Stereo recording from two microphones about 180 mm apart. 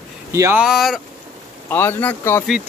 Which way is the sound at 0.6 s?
Centre (ahead or behind).